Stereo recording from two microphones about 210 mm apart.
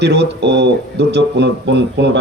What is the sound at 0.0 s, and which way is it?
Speech, 55° right (ahead or behind).